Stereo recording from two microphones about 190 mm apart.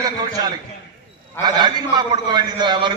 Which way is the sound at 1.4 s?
20° right (ahead or behind).